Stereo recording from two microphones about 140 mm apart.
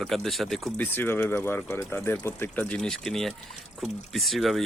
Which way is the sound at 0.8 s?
15° left (ahead or behind).